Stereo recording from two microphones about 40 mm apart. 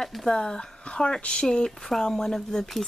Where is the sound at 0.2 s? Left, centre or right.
Centre.